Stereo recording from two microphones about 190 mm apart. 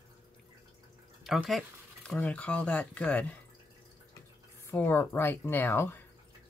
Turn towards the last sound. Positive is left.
turn(degrees=10)  # may be behind; listen again after turning